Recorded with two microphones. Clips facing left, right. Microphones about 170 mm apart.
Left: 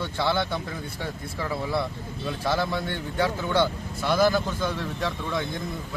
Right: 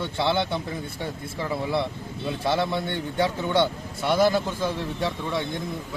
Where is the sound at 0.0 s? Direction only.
20° right (ahead or behind).